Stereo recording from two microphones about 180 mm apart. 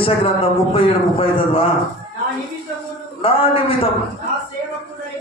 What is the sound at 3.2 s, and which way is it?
Speech, 30° left (ahead or behind).